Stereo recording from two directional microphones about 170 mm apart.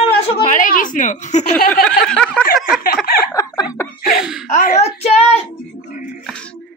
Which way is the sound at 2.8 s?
60° left (ahead or behind).